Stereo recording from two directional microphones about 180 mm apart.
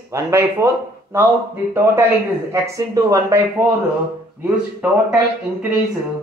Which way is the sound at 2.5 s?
15° right (ahead or behind).